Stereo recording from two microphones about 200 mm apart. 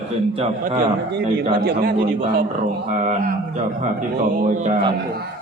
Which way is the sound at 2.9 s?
40° right (ahead or behind).